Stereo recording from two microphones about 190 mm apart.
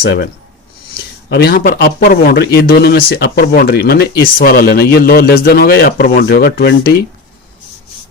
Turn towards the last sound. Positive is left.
turn(degrees=55)  # may be behind; listen again after turning